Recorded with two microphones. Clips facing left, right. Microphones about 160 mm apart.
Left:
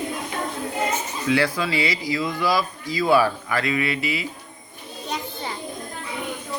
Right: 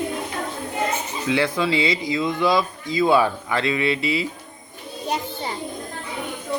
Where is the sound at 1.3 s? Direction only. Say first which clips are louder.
Right 1 dB; 20° right (ahead or behind).